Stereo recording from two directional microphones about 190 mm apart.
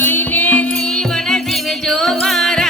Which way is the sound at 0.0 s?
10° left (ahead or behind).